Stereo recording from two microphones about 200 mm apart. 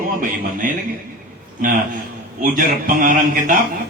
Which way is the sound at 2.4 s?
45° right (ahead or behind).